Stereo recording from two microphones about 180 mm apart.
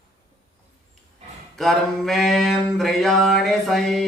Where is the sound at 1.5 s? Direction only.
Centre (ahead or behind).